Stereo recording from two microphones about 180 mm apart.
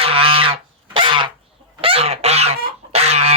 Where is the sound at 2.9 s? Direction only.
35° right (ahead or behind).